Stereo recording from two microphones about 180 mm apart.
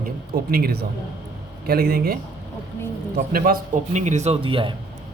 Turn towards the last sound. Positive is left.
turn(degrees=-30)  # may be behind; listen again after turning